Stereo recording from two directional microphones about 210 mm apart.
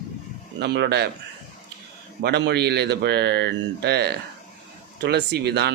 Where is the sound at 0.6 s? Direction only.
50° right (ahead or behind).